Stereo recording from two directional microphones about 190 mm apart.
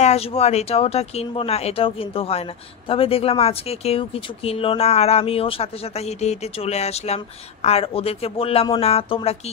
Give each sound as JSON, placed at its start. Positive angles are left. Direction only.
{"t": 0.0, "sound": "speech", "side_deg": 35}